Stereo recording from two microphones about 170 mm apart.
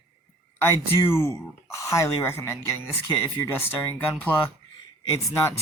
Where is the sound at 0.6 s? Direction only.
15° left (ahead or behind).